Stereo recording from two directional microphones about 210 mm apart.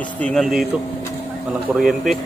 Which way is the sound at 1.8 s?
Centre (ahead or behind).